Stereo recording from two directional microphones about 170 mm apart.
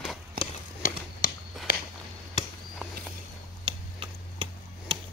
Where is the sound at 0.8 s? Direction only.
60° left (ahead or behind).